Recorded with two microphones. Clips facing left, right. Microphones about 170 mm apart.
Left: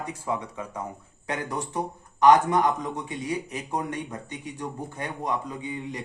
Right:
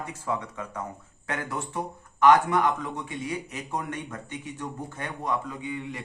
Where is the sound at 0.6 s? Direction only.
10° left (ahead or behind).